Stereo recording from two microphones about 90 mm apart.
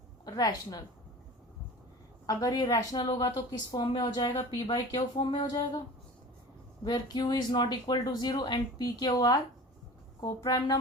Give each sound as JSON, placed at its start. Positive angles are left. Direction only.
{"t": 0.3, "sound": "speech", "side_deg": 45}
{"t": 2.2, "sound": "speech", "side_deg": 45}
{"t": 3.0, "sound": "speech", "side_deg": 55}
{"t": 4.5, "sound": "speech", "side_deg": 45}
{"t": 6.8, "sound": "speech", "side_deg": 50}